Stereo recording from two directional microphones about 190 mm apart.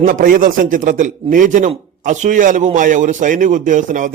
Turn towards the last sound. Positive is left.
turn(degrees=-40)  # may be behind; listen again after turning